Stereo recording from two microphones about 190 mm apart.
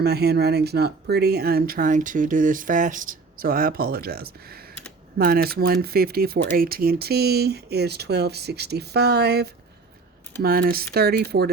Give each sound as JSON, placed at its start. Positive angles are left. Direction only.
{"t": 0.0, "sound": "speech", "side_deg": -60}